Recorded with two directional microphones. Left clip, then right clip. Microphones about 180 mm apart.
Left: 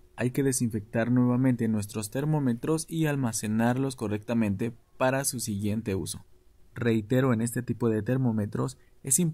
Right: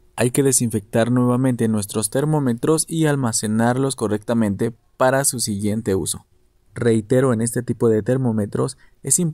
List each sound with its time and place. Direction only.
0.1 s speech: 45° right (ahead or behind)